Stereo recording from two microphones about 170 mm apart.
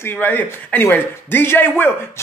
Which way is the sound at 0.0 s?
10° left (ahead or behind).